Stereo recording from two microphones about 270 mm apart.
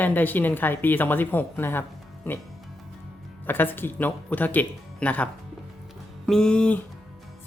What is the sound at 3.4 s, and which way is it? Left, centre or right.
Speech, centre.